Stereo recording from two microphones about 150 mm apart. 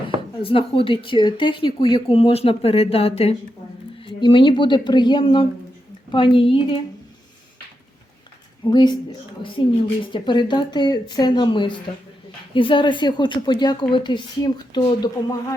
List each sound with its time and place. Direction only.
0.3 s a woman's voice: 35° left (ahead or behind)
8.6 s a woman's voice: 30° left (ahead or behind)